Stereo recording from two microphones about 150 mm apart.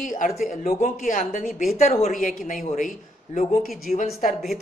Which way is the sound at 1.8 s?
50° left (ahead or behind).